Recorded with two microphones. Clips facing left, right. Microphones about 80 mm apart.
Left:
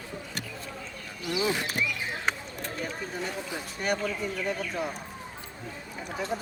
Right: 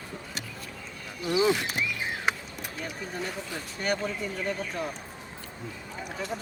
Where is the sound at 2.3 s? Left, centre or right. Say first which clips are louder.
Right 1 dB; centre.